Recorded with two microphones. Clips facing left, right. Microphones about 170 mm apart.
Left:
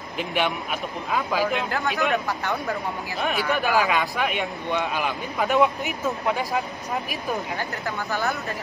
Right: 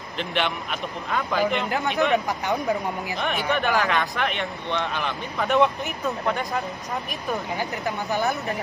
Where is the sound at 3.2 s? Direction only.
5° left (ahead or behind).